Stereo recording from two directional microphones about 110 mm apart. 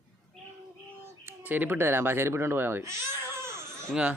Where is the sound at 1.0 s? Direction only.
20° right (ahead or behind).